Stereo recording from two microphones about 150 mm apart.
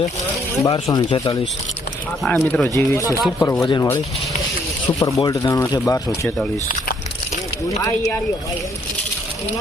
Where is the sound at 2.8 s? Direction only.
20° left (ahead or behind).